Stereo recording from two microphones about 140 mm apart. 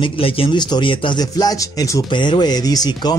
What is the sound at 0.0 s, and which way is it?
Speech, 40° left (ahead or behind).